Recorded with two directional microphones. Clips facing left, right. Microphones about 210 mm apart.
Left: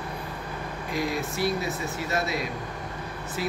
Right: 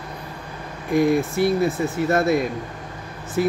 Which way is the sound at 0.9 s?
55° right (ahead or behind).